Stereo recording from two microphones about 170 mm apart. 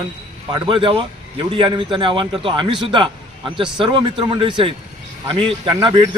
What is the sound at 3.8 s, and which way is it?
A man's voice, 30° right (ahead or behind).